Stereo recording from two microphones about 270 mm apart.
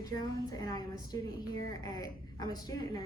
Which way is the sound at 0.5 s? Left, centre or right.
Centre.